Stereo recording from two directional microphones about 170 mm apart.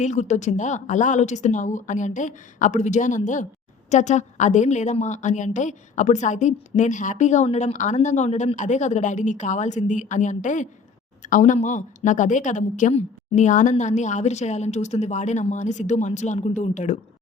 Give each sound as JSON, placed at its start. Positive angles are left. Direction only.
{"t": 0.0, "sound": "a woman's voice", "side_deg": 45}